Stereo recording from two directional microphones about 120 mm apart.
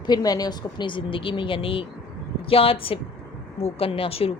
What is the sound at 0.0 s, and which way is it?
Speech, 35° left (ahead or behind).